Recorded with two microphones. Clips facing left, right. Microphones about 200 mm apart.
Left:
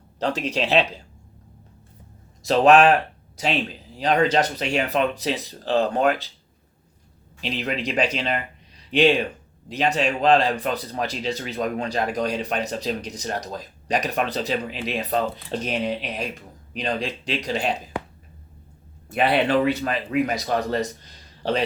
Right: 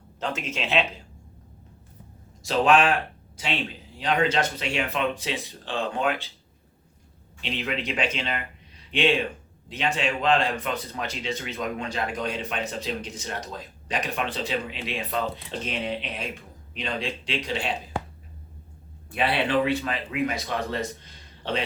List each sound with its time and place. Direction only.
0.2 s speech: 35° left (ahead or behind)
2.5 s speech: 40° left (ahead or behind)
4.0 s speech: 40° left (ahead or behind)
7.6 s speech: 40° left (ahead or behind)
9.6 s speech: 40° left (ahead or behind)
19.1 s speech: 45° left (ahead or behind)